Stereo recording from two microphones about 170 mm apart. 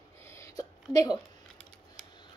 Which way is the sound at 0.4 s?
20° left (ahead or behind).